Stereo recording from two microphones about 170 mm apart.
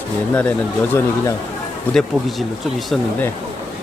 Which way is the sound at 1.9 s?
10° left (ahead or behind).